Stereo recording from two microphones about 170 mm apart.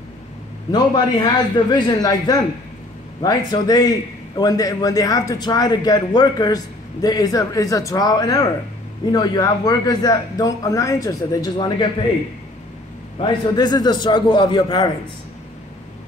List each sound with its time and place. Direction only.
0.7 s a man's voice: 25° left (ahead or behind)
13.2 s a man's voice: 25° left (ahead or behind)